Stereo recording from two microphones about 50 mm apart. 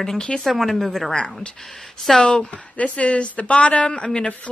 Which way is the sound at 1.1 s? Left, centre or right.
Centre.